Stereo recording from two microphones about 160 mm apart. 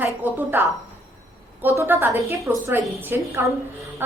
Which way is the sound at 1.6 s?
15° right (ahead or behind).